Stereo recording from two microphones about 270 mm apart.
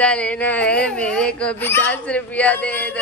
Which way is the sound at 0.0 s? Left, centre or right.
Centre.